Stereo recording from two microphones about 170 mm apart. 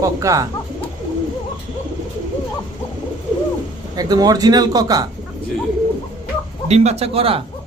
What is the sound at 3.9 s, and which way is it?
A man's voice, 20° right (ahead or behind).